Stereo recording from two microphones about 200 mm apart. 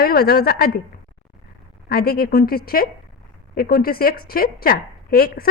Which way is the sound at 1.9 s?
50° left (ahead or behind).